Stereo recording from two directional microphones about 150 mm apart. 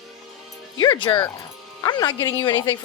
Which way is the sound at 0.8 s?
30° left (ahead or behind).